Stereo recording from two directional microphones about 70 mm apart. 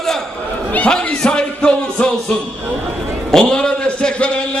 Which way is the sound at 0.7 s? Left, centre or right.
Centre.